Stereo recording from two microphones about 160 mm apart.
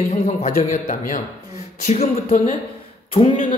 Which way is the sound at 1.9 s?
45° left (ahead or behind).